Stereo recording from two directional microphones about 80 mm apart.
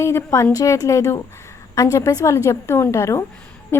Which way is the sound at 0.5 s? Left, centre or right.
Left.